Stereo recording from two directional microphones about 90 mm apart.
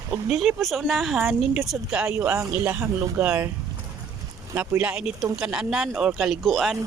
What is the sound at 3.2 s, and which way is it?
Speech, 15° right (ahead or behind).